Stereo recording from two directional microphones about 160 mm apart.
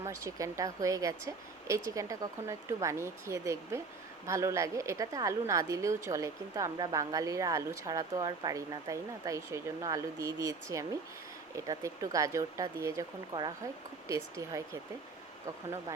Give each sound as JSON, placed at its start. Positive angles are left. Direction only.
{"t": 0.0, "sound": "a woman's voice", "side_deg": -20}